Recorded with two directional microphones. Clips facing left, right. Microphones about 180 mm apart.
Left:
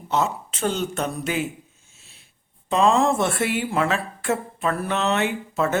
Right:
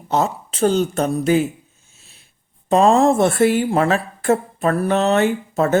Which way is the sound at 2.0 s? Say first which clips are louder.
Right 2 dB; 40° right (ahead or behind).